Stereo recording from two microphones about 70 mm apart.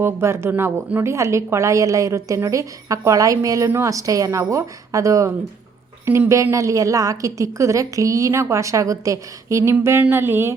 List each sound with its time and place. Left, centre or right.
0.0 s a woman's voice: right
10.1 s speech: right